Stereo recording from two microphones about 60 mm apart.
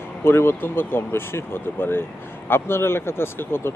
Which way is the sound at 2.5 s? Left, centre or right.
Left.